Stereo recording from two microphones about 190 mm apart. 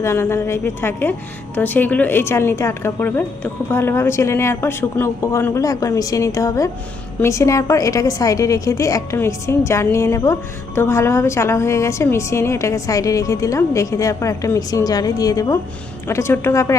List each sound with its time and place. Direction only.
0.0 s a woman's voice: 15° left (ahead or behind)